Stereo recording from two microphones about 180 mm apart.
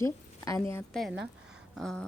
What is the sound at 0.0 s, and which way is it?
Speech, 15° left (ahead or behind).